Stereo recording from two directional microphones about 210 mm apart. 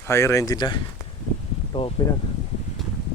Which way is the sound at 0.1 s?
15° left (ahead or behind).